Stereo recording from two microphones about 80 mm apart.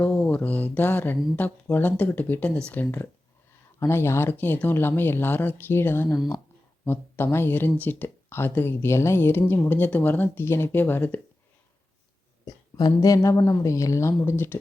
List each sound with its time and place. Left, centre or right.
0.0 s speech: centre
12.5 s a woman's voice: left
14.3 s speech: left